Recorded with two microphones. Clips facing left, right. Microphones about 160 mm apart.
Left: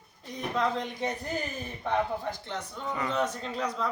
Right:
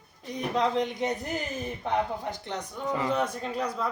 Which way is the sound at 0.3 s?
20° right (ahead or behind).